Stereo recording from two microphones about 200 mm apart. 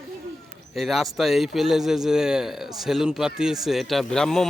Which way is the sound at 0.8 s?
Centre (ahead or behind).